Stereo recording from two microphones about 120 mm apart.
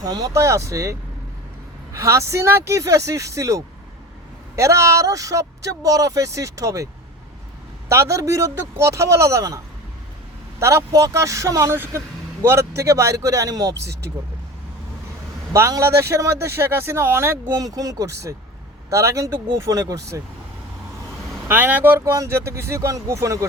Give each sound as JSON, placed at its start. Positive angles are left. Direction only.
{"t": 0.0, "sound": "speech", "side_deg": -30}
{"t": 7.9, "sound": "speech", "side_deg": -25}
{"t": 10.6, "sound": "speech", "side_deg": -25}
{"t": 15.5, "sound": "speech", "side_deg": -25}
{"t": 17.5, "sound": "speech", "side_deg": -30}
{"t": 21.4, "sound": "speech", "side_deg": -15}